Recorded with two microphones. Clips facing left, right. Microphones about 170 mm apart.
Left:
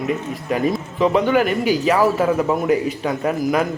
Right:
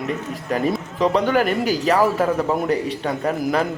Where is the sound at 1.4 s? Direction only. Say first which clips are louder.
Left 2 dB; 40° right (ahead or behind).